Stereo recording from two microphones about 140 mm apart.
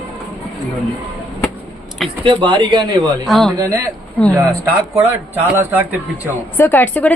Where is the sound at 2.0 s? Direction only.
35° right (ahead or behind).